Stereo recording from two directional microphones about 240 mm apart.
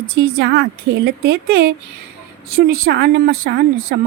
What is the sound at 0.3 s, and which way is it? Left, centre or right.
Speech, right.